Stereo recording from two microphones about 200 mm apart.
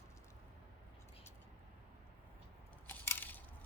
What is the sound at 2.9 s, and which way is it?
Coin, 10° left (ahead or behind).